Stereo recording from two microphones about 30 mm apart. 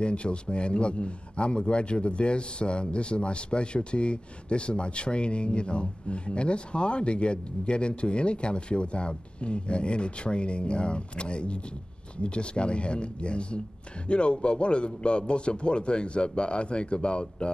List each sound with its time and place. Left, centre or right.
0.0 s speech: left